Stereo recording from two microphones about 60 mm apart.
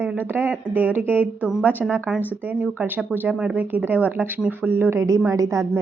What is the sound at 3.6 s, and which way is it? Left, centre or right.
Speech, right.